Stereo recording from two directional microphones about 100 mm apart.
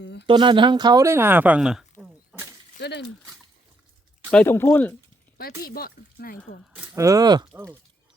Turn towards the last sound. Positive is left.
turn(degrees=-45)  # may be behind; listen again after turning